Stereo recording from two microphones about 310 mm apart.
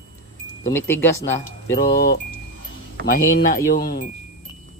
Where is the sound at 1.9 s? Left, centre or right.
Left.